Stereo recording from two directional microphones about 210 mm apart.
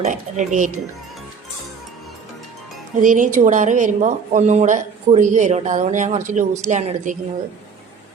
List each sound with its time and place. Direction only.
0.0 s a woman's voice: 35° right (ahead or behind)
3.0 s a woman's voice: 40° right (ahead or behind)